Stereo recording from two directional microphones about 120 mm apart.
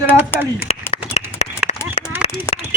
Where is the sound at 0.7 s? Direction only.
60° left (ahead or behind).